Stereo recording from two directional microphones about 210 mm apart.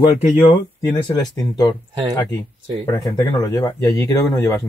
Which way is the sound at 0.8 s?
20° left (ahead or behind).